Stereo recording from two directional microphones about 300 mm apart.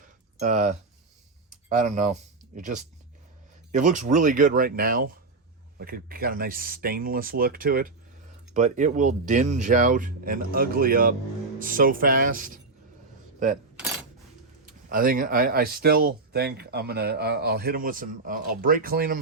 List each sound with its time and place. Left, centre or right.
0.3 s speech: right
1.7 s speech: right
3.7 s speech: right
14.7 s speech: right